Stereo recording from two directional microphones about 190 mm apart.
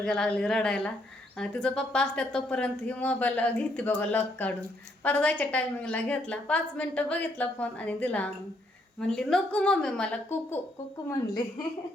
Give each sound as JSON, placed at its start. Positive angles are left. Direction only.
{"t": 0.0, "sound": "a woman's voice", "side_deg": 5}
{"t": 11.1, "sound": "a woman's voice", "side_deg": 20}